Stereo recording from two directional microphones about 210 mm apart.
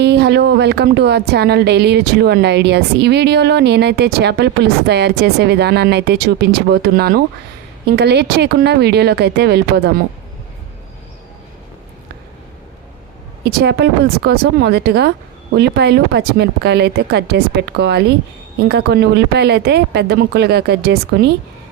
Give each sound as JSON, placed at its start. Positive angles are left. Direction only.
{"t": 0.0, "sound": "speech", "side_deg": -55}
{"t": 13.4, "sound": "speech", "side_deg": -50}